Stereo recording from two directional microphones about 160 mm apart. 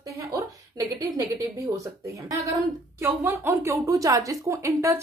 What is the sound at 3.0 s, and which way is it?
A woman's voice, 15° right (ahead or behind).